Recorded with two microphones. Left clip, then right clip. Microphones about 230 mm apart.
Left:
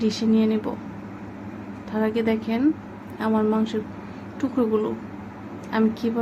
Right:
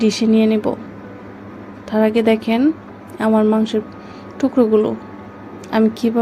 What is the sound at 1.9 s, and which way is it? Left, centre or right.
Speech, right.